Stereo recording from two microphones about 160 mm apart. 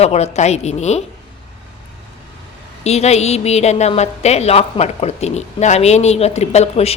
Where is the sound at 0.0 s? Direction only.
40° left (ahead or behind).